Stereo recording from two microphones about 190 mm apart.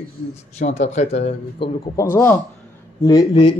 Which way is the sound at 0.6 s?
35° left (ahead or behind).